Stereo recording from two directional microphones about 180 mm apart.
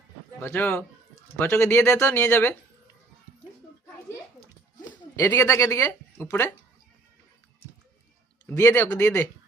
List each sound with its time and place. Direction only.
0.3 s speech: 10° left (ahead or behind)
5.1 s speech: 20° left (ahead or behind)
8.4 s speech: 10° left (ahead or behind)